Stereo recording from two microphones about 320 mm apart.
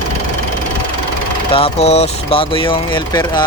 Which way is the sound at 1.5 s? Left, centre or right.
Centre.